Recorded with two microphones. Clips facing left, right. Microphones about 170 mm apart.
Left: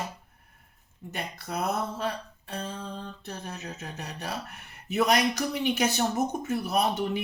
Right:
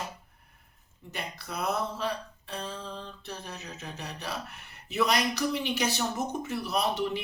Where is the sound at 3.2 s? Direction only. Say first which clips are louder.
Left 3 dB; 50° left (ahead or behind).